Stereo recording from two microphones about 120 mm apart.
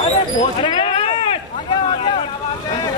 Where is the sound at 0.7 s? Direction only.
45° left (ahead or behind).